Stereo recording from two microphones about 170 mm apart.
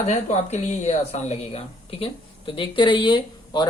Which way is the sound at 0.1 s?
45° left (ahead or behind).